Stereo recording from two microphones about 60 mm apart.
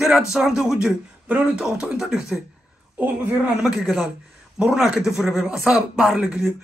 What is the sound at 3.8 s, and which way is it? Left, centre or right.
Speech, centre.